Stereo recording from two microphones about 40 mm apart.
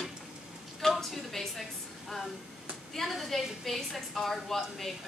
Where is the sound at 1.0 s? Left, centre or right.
Centre.